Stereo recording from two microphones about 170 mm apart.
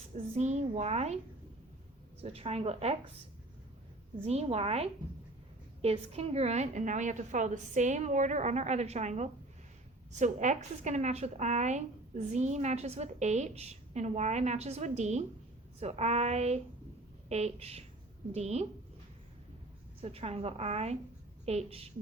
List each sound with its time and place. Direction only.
0.3 s a woman's voice: 40° right (ahead or behind)
2.2 s a woman's voice: 35° right (ahead or behind)
4.2 s a woman's voice: 40° right (ahead or behind)
20.0 s a woman's voice: 35° right (ahead or behind)